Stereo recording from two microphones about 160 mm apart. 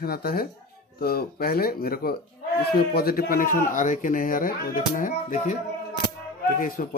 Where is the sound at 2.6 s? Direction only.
80° left; by 5.6 s 55° left (ahead or behind).